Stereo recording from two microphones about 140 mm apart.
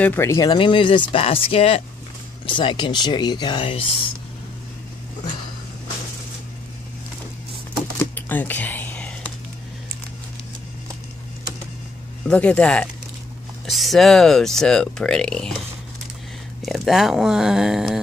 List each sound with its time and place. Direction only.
0.0 s speech: 15° left (ahead or behind); by 4.0 s 40° left (ahead or behind)
8.0 s typing: 15° left (ahead or behind)
12.3 s speech: 10° left (ahead or behind)
16.6 s speech: centre (ahead or behind)